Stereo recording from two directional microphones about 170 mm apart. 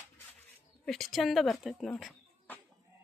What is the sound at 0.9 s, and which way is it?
Speech, centre (ahead or behind).